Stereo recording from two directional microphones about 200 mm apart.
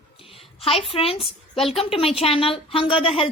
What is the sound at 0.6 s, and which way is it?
A woman's voice, 30° left (ahead or behind).